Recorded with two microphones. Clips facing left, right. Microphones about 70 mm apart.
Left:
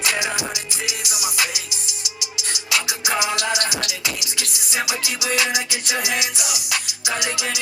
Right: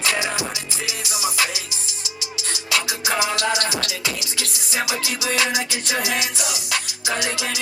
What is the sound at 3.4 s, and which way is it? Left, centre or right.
Music, right.